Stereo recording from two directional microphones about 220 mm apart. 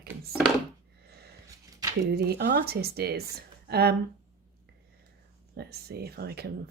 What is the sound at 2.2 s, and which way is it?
Speech, 45° right (ahead or behind).